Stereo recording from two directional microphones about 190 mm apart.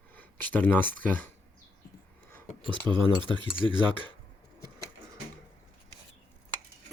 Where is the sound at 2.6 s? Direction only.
25° right (ahead or behind).